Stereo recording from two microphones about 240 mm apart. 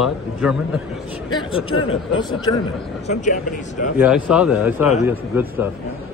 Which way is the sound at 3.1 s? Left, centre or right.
Left.